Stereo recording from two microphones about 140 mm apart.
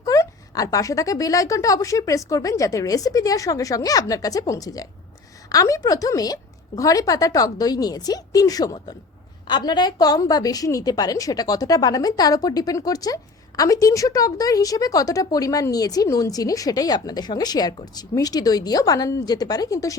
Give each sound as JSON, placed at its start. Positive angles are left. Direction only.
{"t": 0.0, "sound": "a woman's voice", "side_deg": 25}